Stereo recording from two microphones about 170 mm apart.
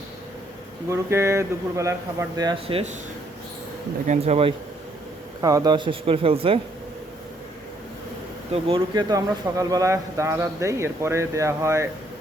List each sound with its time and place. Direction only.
0.9 s speech: 15° right (ahead or behind); by 2.9 s 35° right (ahead or behind)
4.0 s speech: 45° right (ahead or behind)
5.4 s a man's voice: 20° right (ahead or behind)
8.5 s speech: 35° right (ahead or behind)
8.9 s speech: 25° right (ahead or behind)